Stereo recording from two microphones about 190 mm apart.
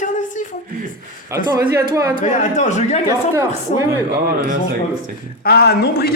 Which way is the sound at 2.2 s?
40° left (ahead or behind).